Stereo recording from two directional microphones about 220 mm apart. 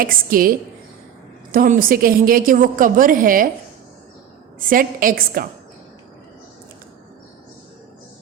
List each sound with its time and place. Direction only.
0.0 s a woman's voice: 40° right (ahead or behind)
1.5 s a woman's voice: 40° right (ahead or behind)
4.7 s a woman's voice: 40° right (ahead or behind)